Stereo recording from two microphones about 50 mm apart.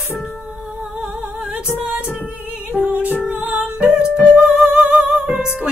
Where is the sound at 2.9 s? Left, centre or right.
Right.